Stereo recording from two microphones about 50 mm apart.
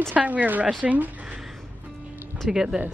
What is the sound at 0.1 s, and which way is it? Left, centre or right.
Speech, right.